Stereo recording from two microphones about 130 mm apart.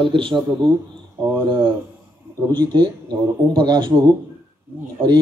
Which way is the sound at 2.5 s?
35° right (ahead or behind).